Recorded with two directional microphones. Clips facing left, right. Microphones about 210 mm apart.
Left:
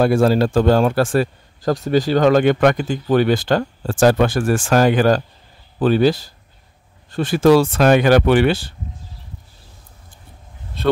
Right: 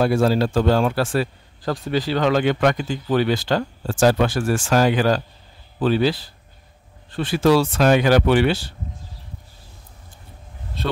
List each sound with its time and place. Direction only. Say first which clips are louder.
0.0 s speech: left 3 dB; 50° left (ahead or behind)